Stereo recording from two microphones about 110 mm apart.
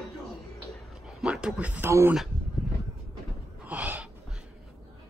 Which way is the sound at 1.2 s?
10° right (ahead or behind).